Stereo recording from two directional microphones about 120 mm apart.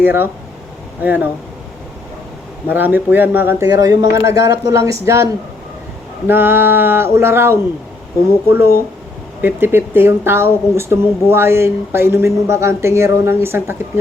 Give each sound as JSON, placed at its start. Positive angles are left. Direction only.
{"t": 0.0, "sound": "speech", "side_deg": -15}
{"t": 2.6, "sound": "speech", "side_deg": -15}